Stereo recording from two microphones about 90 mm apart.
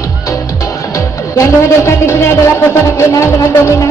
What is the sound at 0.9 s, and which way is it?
Music, 35° left (ahead or behind).